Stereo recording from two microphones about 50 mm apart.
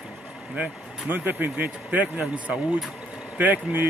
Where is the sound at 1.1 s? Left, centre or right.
Right.